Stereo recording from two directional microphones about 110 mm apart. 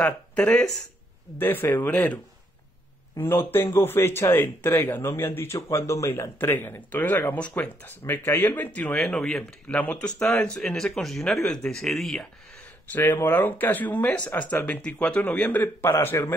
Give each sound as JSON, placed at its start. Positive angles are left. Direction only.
{"t": 0.0, "sound": "speech", "side_deg": 10}
{"t": 3.2, "sound": "speech", "side_deg": 20}
{"t": 12.9, "sound": "speech", "side_deg": 20}